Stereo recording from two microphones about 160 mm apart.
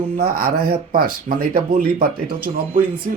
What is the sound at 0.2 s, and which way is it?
Speech, 65° right (ahead or behind).